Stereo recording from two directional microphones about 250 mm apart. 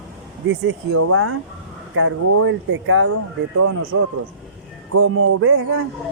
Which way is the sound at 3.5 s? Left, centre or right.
Right.